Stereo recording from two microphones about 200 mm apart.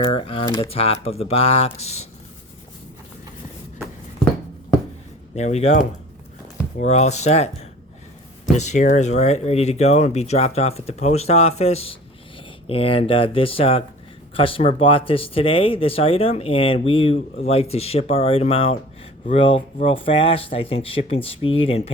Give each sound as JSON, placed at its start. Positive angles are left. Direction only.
{"t": 0.0, "sound": "speech", "side_deg": 30}
{"t": 0.4, "sound": "speech", "side_deg": 15}
{"t": 0.7, "sound": "speech", "side_deg": 30}
{"t": 5.3, "sound": "speech", "side_deg": 35}
{"t": 8.5, "sound": "speech", "side_deg": 35}